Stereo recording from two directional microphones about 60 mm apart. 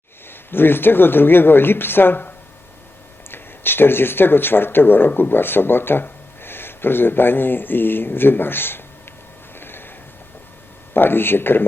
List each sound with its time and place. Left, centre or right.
0.5 s speech: left
9.6 s a sound: left
10.9 s speech: left